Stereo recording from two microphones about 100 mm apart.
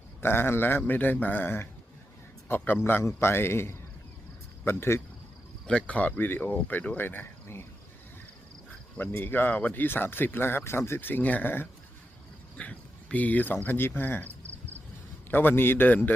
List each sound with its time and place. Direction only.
0.2 s speech: 20° left (ahead or behind)
2.8 s speech: 25° left (ahead or behind)
5.6 s speech: 10° left (ahead or behind)
9.0 s speech: 20° left (ahead or behind)
15.3 s speech: 20° left (ahead or behind)